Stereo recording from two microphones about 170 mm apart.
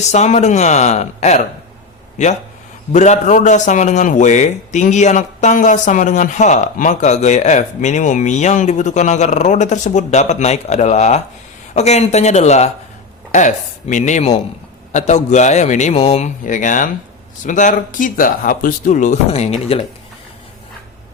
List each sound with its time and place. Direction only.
0.1 s speech: 40° left (ahead or behind)
2.9 s a man's voice: 45° left (ahead or behind)